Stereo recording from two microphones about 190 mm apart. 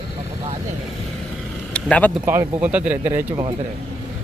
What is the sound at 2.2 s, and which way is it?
Speech, 10° right (ahead or behind).